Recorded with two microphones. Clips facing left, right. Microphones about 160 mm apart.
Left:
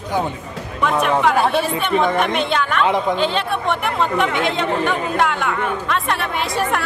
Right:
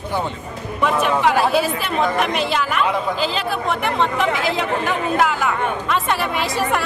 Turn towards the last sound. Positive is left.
turn(degrees=0)  # may be behind; listen again after turning